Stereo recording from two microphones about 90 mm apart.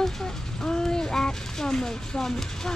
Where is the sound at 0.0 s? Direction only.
5° left (ahead or behind).